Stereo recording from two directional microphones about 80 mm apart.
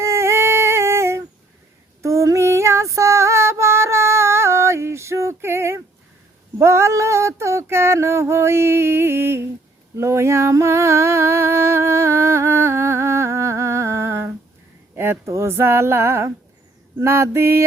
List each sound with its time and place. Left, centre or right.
0.0 s singing: right
2.0 s female singing: right
6.6 s a sound: right